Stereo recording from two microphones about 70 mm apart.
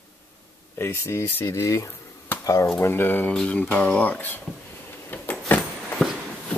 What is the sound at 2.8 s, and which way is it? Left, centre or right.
Speech, left.